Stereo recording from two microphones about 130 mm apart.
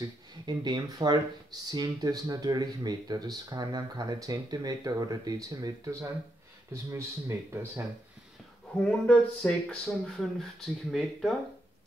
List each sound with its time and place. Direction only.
0.0 s speech: 35° right (ahead or behind)
8.7 s speech: 10° left (ahead or behind)